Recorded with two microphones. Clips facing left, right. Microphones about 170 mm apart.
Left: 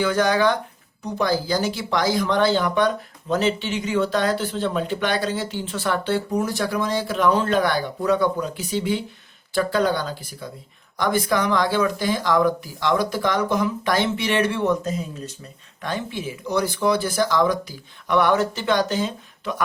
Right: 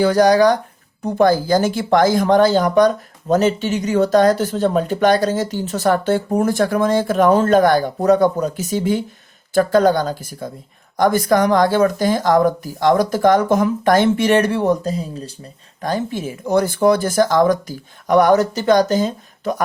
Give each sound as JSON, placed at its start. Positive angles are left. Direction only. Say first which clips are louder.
{"t": 0.0, "sound": "speech", "louder": "right 7 dB", "side_deg": -40}
{"t": 1.0, "sound": "speech", "louder": "right 8 dB", "side_deg": -50}